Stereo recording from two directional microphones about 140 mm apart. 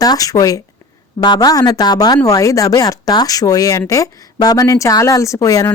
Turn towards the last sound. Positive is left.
turn(degrees=25)  # may be behind; listen again after turning